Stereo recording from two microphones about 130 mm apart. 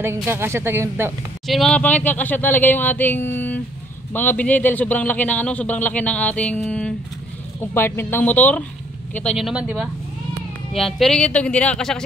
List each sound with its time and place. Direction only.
0.3 s speech: 20° right (ahead or behind)
1.5 s a man's voice: 5° left (ahead or behind)
7.7 s a man's voice: 20° left (ahead or behind)
9.4 s a man's voice: 10° right (ahead or behind)